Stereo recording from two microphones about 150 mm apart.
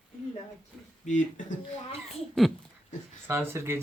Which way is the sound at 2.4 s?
5° left (ahead or behind).